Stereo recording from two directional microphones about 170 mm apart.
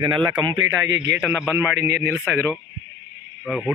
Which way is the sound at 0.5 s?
15° right (ahead or behind).